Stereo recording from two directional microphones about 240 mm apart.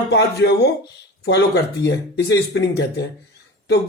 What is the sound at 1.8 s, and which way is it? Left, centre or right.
Speech, left.